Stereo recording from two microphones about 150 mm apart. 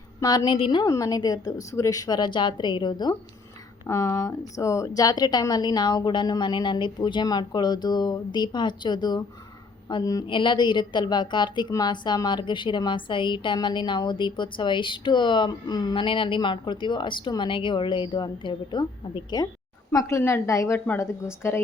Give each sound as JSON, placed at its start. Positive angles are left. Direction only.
{"t": 0.2, "sound": "a woman's voice", "side_deg": 25}